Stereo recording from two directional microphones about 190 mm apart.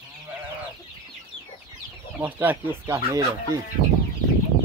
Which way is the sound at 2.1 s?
10° right (ahead or behind).